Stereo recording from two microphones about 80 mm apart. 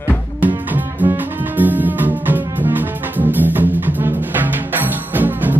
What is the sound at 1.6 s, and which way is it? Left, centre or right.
Music, right.